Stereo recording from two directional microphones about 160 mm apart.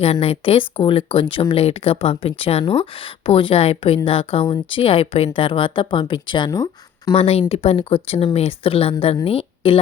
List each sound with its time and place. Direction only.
0.0 s speech: 40° left (ahead or behind)
7.2 s a woman's voice: 40° left (ahead or behind)